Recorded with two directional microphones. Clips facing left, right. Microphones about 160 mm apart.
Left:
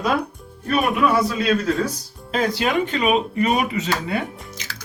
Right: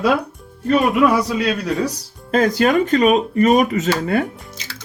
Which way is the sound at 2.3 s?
45° right (ahead or behind).